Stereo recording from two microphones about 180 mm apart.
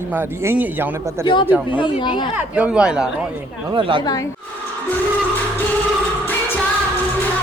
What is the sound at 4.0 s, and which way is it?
Speech, 20° left (ahead or behind).